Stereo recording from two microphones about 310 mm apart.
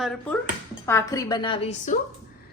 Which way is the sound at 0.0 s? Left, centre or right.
Centre.